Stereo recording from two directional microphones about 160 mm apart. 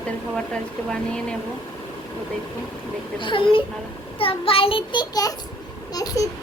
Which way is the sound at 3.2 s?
30° left (ahead or behind).